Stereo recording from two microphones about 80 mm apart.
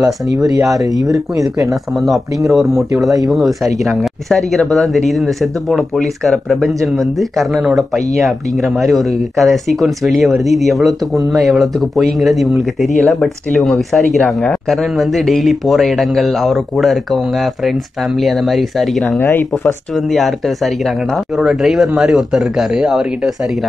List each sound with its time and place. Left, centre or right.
0.0 s speech: right
1.7 s speech: centre